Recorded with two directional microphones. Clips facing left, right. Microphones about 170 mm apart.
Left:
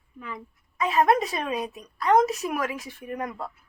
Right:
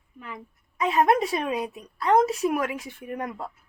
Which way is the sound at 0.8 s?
25° right (ahead or behind).